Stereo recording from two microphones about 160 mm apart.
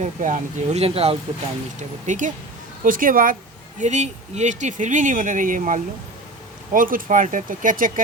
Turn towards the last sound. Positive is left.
turn(degrees=-55)  # may be behind; listen again after turning